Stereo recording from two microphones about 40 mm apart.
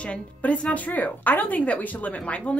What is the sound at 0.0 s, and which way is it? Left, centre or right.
Speech, left.